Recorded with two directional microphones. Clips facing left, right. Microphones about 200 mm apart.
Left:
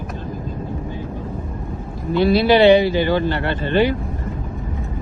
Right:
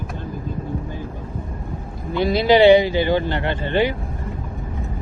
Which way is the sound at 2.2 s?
15° right (ahead or behind).